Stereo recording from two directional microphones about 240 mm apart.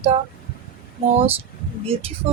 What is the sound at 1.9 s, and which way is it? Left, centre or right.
Speech, right.